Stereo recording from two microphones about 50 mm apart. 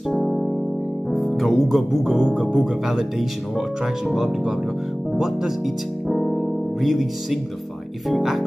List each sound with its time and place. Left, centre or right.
0.1 s music: centre
1.1 s speech: centre
6.0 s music: centre
8.1 s speech: centre